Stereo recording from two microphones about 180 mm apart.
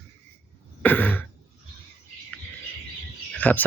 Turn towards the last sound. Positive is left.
turn(degrees=10)  # may be behind; listen again after turning